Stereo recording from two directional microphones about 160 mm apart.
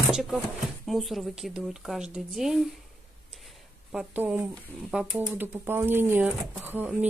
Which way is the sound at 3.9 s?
5° right (ahead or behind).